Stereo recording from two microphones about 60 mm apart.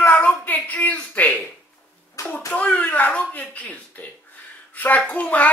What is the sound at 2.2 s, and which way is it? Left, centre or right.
Hands, left.